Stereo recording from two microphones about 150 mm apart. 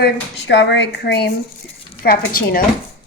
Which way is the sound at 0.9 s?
90° left.